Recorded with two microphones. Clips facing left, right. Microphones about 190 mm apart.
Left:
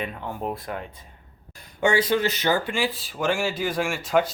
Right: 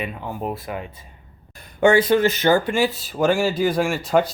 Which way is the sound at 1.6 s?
55° right (ahead or behind).